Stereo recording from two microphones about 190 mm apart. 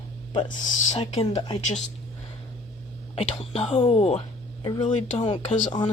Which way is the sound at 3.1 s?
30° left (ahead or behind).